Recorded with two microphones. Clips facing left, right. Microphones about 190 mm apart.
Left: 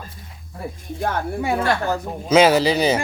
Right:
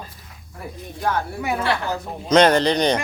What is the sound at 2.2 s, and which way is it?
Speech, 5° left (ahead or behind).